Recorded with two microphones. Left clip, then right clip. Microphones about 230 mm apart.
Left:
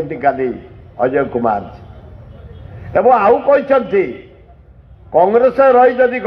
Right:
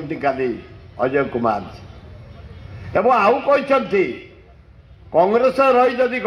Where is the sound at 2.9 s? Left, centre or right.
Right.